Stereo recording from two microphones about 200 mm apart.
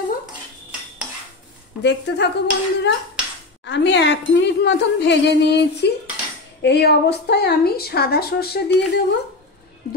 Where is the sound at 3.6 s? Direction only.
65° left (ahead or behind).